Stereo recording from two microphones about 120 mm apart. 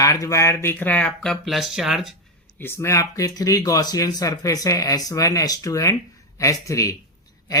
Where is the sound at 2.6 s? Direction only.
25° left (ahead or behind).